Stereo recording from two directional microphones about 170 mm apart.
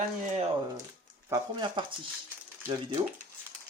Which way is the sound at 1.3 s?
25° right (ahead or behind).